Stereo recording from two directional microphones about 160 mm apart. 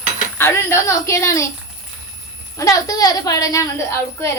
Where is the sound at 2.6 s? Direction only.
20° left (ahead or behind).